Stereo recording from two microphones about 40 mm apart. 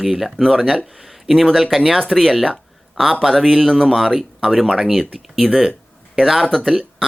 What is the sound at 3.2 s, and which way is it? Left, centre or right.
Speech, centre.